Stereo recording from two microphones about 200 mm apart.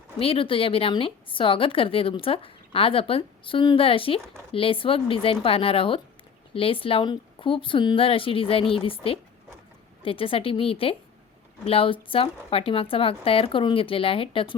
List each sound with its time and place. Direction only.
0.2 s speech: 25° left (ahead or behind)